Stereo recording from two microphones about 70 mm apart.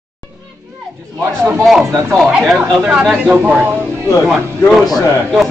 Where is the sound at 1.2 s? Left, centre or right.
Right.